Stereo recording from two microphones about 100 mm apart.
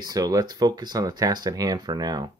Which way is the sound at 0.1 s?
35° right (ahead or behind).